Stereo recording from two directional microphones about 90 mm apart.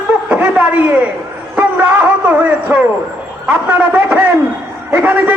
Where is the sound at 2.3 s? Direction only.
15° right (ahead or behind).